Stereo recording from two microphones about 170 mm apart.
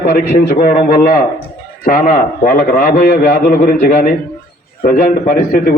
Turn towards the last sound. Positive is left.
turn(degrees=60)  # may be behind; listen again after turning